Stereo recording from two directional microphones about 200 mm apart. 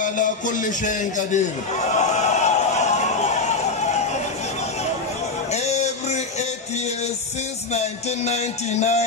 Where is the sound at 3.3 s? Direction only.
35° left (ahead or behind).